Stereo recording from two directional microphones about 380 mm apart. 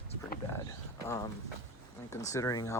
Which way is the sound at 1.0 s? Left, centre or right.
Centre.